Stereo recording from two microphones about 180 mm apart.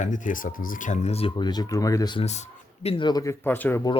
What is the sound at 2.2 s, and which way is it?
Speech, 40° left (ahead or behind).